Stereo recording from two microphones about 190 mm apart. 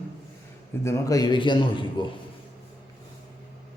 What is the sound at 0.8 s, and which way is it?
A man's voice, 15° left (ahead or behind).